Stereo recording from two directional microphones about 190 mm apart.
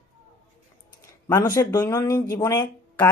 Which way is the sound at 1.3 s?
20° left (ahead or behind).